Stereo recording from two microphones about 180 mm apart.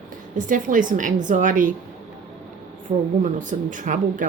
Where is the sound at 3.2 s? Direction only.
45° right (ahead or behind).